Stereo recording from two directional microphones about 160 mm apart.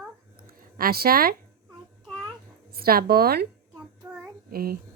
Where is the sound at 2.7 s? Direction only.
70° right (ahead or behind).